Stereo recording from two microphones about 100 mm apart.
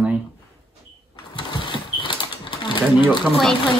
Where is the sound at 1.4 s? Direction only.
50° left (ahead or behind).